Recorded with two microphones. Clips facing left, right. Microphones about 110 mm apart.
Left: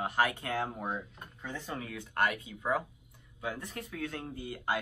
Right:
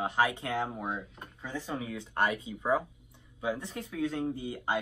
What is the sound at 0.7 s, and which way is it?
Speech, 5° right (ahead or behind).